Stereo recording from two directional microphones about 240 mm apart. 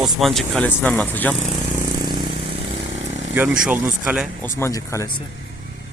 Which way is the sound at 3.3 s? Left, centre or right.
Centre.